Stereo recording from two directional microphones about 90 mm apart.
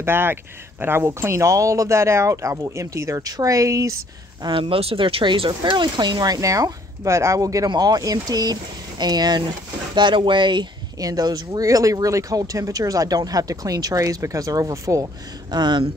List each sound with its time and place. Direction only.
0.0 s speech: 25° right (ahead or behind)
4.4 s speech: 65° right (ahead or behind); by 9.4 s 50° right (ahead or behind)
9.9 s speech: 60° right (ahead or behind)
11.0 s speech: 45° right (ahead or behind)
15.5 s speech: 60° right (ahead or behind)